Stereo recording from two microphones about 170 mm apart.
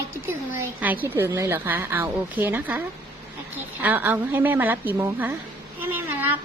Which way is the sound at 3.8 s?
10° right (ahead or behind).